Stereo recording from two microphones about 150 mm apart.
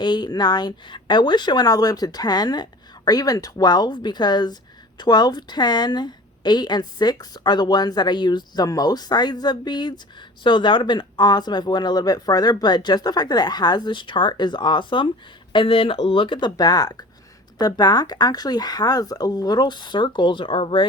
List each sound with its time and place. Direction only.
0.0 s a woman's voice: 30° left (ahead or behind)